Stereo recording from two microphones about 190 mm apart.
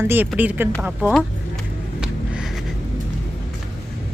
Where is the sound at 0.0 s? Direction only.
10° right (ahead or behind).